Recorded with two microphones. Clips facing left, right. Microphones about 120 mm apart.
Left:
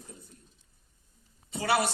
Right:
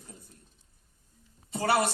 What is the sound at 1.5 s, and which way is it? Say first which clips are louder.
Speech: right 1 dB; 40° right (ahead or behind).